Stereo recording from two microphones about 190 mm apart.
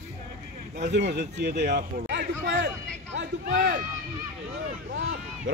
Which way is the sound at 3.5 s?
45° right (ahead or behind).